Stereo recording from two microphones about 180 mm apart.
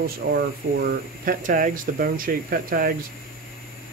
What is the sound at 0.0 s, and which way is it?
Speech, 60° right (ahead or behind).